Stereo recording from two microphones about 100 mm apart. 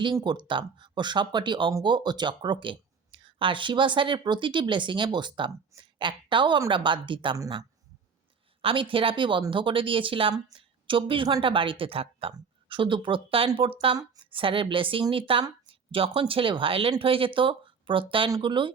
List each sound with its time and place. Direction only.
0.3 s a woman's voice: 50° right (ahead or behind)
8.6 s a woman's voice: 60° right (ahead or behind)
12.6 s a woman's voice: 55° right (ahead or behind)